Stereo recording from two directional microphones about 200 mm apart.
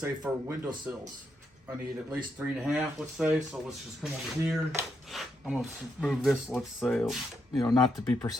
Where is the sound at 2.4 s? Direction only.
5° right (ahead or behind).